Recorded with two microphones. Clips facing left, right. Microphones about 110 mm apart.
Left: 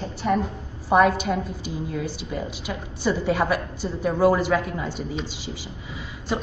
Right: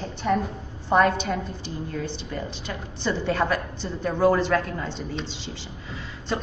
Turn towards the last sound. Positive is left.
turn(degrees=10)  # may be behind; listen again after turning